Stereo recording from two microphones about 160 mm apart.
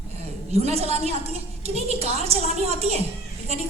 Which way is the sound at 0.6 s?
40° right (ahead or behind).